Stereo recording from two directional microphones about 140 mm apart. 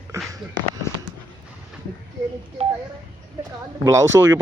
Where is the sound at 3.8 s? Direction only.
20° right (ahead or behind).